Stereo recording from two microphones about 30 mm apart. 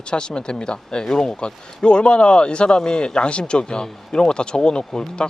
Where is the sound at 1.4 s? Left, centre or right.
Left.